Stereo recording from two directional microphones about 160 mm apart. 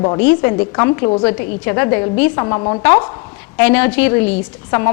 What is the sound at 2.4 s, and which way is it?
Speech, 25° left (ahead or behind).